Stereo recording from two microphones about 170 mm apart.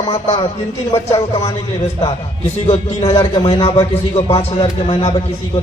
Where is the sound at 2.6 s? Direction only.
40° left (ahead or behind).